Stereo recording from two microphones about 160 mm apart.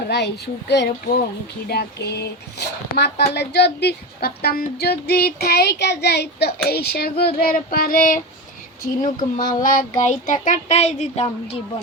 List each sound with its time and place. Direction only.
0.1 s speech: 90° left
1.6 s speech: 80° left
6.7 s child singing: 75° left (ahead or behind); by 8.2 s 60° left (ahead or behind)
8.8 s speech: 55° left (ahead or behind)
9.6 s a sound: 50° left (ahead or behind)